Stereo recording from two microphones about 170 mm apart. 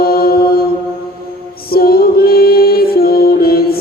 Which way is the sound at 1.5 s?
65° left (ahead or behind).